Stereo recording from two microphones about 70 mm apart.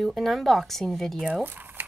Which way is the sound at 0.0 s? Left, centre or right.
Centre.